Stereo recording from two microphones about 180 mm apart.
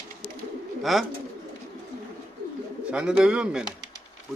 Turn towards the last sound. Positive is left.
turn(degrees=-5)  # may be behind; listen again after turning